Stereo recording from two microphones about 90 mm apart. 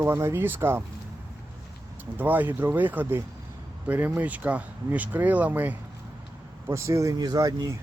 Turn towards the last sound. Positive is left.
turn(degrees=-45)  # may be behind; listen again after turning